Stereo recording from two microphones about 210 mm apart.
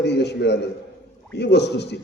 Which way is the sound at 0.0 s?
55° left (ahead or behind).